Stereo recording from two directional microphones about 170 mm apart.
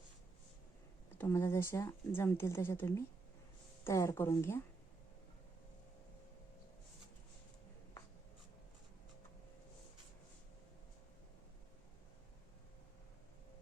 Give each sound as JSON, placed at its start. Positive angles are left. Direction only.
{"t": 1.2, "sound": "speech", "side_deg": 15}